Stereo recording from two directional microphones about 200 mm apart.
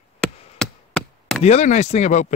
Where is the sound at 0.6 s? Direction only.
5° left (ahead or behind).